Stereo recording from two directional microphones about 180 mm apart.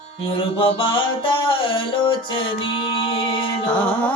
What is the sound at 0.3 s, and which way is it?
Mantra, 30° left (ahead or behind).